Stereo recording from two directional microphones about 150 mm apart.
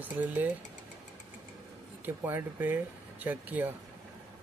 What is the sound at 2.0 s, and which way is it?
Speech, 15° right (ahead or behind).